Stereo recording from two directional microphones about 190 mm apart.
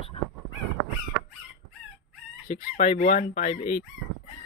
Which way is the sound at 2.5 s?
35° left (ahead or behind).